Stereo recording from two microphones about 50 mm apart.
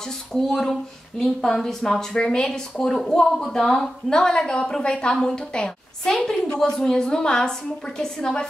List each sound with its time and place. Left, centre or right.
0.3 s a woman's voice: centre